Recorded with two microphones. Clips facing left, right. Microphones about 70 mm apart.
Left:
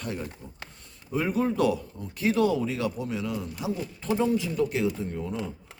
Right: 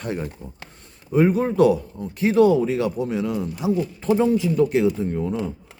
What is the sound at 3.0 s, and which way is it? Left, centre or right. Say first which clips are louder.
Speech: right 7 dB; right.